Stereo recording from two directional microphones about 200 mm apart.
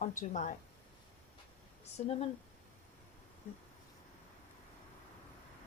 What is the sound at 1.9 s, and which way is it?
Speech, 30° left (ahead or behind).